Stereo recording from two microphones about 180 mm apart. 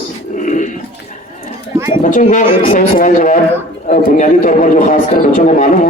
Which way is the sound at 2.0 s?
45° left (ahead or behind).